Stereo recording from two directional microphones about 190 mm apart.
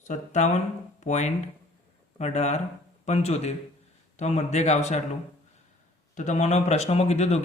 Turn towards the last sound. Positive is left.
turn(degrees=35)  # may be behind; listen again after turning